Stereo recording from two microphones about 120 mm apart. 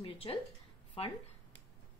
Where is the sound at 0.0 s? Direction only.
50° left (ahead or behind).